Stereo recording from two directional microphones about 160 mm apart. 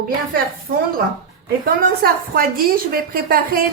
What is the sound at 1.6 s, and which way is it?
A woman's voice, 70° right (ahead or behind).